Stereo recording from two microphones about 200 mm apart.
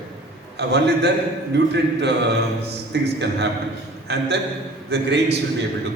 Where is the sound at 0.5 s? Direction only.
55° right (ahead or behind).